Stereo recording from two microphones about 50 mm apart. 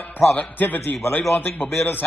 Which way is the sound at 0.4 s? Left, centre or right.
Left.